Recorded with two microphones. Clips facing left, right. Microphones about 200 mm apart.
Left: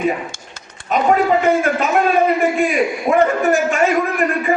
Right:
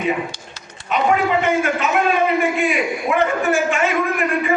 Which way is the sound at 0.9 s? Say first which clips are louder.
Left 3 dB; 40° left (ahead or behind).